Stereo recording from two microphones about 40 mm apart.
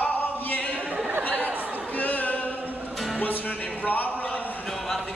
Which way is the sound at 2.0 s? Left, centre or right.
Left.